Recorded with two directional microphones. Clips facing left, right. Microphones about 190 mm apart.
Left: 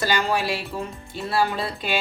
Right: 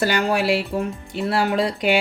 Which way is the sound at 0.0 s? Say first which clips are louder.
Right 3 dB; 60° right (ahead or behind).